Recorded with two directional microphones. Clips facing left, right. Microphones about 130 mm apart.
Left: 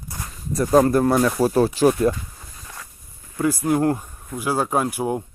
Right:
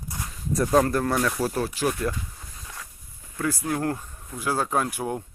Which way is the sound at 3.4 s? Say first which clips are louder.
Left 7 dB; 15° left (ahead or behind).